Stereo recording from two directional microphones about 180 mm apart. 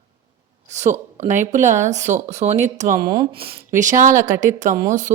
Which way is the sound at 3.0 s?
25° right (ahead or behind).